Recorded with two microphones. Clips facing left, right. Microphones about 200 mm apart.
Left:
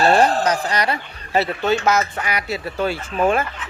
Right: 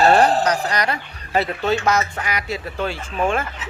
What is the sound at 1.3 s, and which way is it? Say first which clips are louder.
Speech: left 1 dB; centre (ahead or behind).